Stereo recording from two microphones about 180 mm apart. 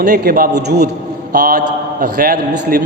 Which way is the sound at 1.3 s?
55° right (ahead or behind).